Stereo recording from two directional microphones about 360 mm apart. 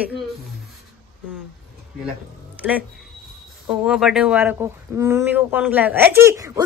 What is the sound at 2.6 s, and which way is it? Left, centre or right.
Speech, centre.